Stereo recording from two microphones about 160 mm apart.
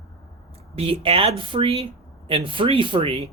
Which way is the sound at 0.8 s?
35° right (ahead or behind).